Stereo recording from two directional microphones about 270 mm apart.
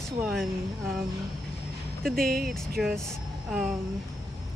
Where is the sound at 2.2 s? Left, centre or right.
Right.